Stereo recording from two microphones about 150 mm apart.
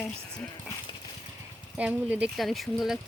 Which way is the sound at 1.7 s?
10° right (ahead or behind).